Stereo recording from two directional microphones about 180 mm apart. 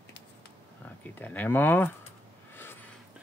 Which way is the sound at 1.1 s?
10° left (ahead or behind).